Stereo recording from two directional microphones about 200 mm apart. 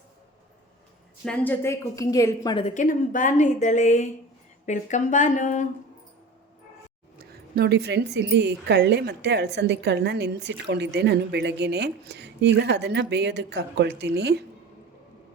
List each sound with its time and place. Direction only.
1.2 s a woman's voice: 5° left (ahead or behind)
2.6 s a woman's voice: 40° left (ahead or behind)
7.2 s a woman's voice: 50° right (ahead or behind)